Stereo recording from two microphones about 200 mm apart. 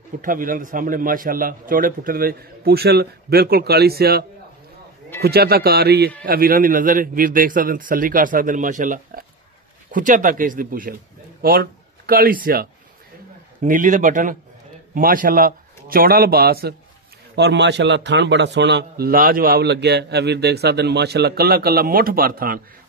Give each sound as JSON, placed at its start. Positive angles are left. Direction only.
{"t": 0.2, "sound": "a man's voice", "side_deg": -45}